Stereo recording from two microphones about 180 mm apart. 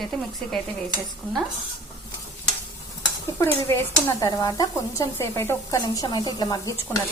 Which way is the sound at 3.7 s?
15° left (ahead or behind).